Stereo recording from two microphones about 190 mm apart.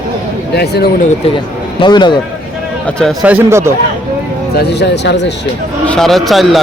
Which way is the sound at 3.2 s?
10° right (ahead or behind).